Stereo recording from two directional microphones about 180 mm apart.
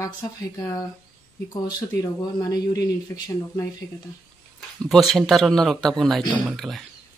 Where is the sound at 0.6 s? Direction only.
15° left (ahead or behind).